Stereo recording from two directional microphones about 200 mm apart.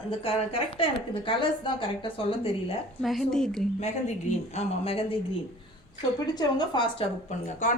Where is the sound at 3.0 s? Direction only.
Centre (ahead or behind).